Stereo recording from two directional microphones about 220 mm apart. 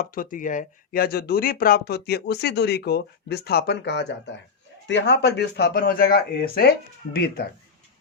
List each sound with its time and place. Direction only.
0.0 s speech: 40° left (ahead or behind)